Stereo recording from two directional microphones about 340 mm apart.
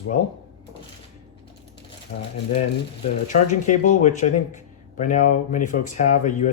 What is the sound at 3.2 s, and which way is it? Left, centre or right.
Speech, left.